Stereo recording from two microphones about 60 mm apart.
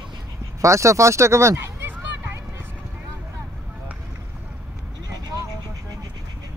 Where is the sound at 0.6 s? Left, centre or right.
Right.